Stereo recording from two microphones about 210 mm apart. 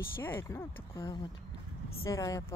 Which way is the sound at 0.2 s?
10° left (ahead or behind).